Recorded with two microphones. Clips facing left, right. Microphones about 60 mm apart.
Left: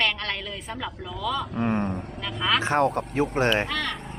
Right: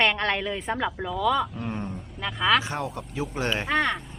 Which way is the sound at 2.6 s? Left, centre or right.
Left.